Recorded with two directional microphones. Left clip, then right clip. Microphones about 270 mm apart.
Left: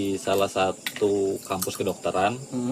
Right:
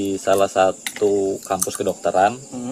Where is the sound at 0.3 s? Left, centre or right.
Right.